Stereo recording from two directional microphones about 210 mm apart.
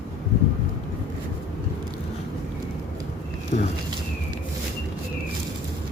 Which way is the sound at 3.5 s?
35° left (ahead or behind).